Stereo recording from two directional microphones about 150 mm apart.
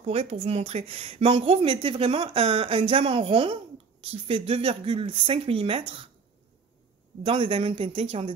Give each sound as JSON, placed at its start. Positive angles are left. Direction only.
{"t": 0.0, "sound": "a woman's voice", "side_deg": -45}
{"t": 7.2, "sound": "a woman's voice", "side_deg": -35}